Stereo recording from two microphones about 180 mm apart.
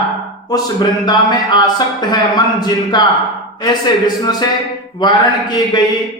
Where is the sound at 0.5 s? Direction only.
25° left (ahead or behind).